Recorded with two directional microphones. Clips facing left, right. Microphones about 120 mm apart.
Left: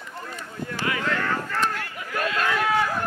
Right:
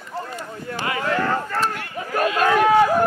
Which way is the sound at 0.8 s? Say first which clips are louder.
Right 4 dB; 30° right (ahead or behind).